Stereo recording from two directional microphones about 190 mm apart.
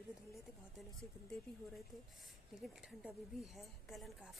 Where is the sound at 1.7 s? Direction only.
Centre (ahead or behind).